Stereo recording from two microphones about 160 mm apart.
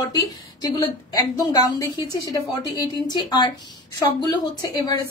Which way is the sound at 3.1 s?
30° left (ahead or behind).